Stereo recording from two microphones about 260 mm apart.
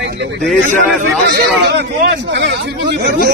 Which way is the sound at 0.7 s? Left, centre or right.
Right.